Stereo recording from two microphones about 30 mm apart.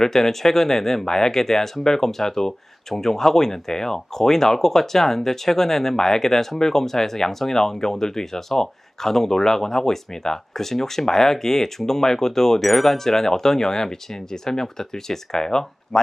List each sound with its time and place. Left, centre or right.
0.0 s speech: centre
12.6 s speech: centre